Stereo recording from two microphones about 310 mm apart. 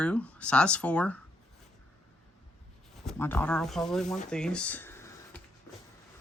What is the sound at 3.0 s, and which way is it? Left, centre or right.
Speech, centre.